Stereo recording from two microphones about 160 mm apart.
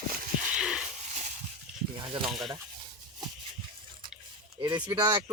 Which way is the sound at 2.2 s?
Centre (ahead or behind).